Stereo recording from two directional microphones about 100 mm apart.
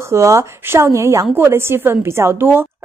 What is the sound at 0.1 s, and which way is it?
A woman's voice, 30° right (ahead or behind).